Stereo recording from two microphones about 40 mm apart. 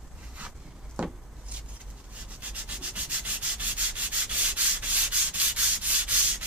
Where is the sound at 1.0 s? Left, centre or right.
Right.